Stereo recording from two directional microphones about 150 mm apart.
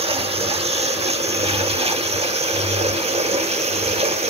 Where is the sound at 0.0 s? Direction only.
40° right (ahead or behind).